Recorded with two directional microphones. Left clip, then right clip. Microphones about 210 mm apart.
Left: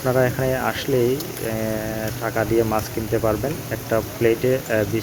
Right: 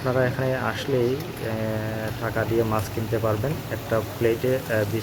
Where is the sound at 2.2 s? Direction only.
20° left (ahead or behind).